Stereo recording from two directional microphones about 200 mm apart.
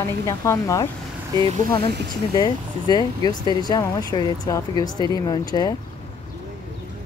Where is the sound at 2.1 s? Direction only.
20° left (ahead or behind).